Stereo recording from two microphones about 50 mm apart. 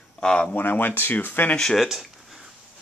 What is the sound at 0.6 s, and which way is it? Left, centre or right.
Speech, left.